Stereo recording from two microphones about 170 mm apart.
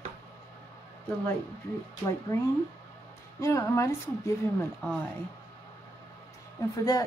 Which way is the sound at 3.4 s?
15° left (ahead or behind).